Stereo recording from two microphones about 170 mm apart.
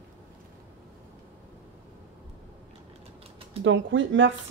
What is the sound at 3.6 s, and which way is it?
Speech, 90° right.